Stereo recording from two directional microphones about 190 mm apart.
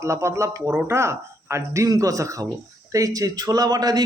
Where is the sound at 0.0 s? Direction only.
15° right (ahead or behind).